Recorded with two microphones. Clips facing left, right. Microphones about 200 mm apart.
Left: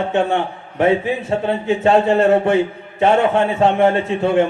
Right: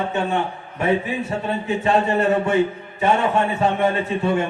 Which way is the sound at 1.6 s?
90° left.